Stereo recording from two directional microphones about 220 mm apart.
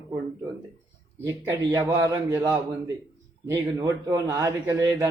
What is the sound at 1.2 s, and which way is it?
Speech, 15° right (ahead or behind).